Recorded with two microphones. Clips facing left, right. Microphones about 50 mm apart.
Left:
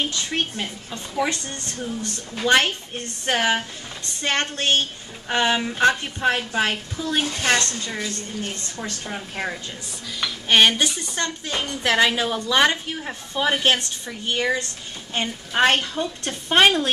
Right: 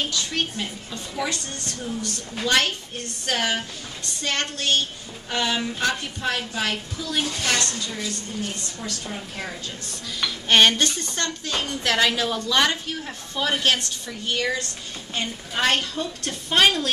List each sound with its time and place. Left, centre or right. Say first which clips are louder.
0.1 s a woman's voice: left 1 dB; left
10.2 s a woman's voice: even; centre; by 16.9 s left